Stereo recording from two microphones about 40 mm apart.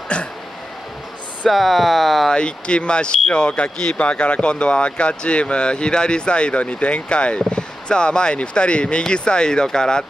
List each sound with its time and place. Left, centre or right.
0.1 s speech: left
1.5 s speech: centre
2.3 s speech: left
3.4 s speech: left